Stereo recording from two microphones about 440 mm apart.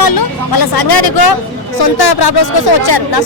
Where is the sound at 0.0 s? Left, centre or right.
Left.